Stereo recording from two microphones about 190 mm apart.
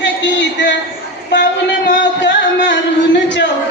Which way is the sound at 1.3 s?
70° left (ahead or behind).